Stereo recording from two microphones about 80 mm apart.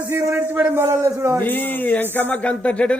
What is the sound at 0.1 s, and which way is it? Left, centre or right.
A man's voice, right.